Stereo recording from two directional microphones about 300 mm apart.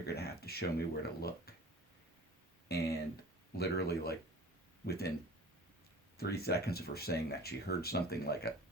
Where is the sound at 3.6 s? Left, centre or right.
Left.